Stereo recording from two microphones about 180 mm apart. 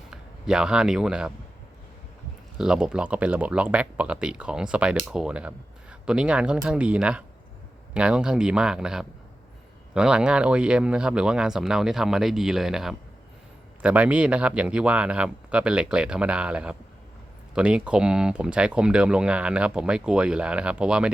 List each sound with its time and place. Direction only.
0.1 s speech: 5° right (ahead or behind)
2.6 s speech: 5° right (ahead or behind)